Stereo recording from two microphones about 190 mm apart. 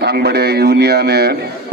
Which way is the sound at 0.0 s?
60° right (ahead or behind).